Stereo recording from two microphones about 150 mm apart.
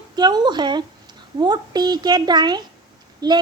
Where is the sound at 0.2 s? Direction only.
25° right (ahead or behind).